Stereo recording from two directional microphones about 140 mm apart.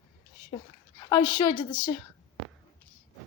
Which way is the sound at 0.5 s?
30° left (ahead or behind).